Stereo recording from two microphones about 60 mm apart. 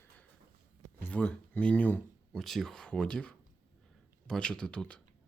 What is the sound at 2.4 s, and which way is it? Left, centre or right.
Speech, centre.